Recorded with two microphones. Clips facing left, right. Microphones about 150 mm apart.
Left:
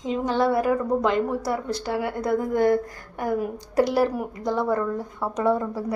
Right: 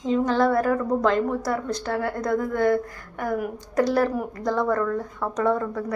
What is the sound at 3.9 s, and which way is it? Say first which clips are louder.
A woman's voice: even; 15° left (ahead or behind).